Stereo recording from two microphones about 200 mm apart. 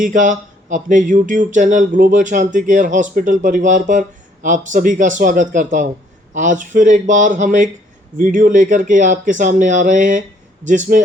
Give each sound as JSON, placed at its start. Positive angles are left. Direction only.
{"t": 0.0, "sound": "speech", "side_deg": -40}